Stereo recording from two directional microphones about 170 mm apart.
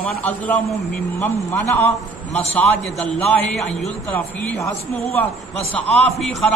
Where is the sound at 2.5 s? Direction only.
10° left (ahead or behind).